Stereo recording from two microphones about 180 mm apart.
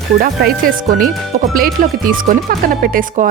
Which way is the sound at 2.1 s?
50° right (ahead or behind).